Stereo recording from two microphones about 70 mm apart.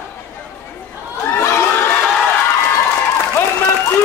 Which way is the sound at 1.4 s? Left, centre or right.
Left.